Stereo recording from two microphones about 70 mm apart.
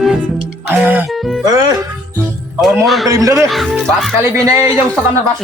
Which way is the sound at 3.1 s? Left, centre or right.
Right.